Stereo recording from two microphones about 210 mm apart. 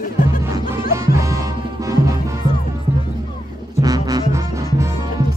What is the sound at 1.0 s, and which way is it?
Music, 15° right (ahead or behind).